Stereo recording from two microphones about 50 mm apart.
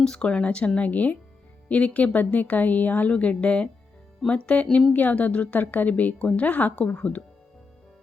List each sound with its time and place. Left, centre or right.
0.0 s a woman's voice: centre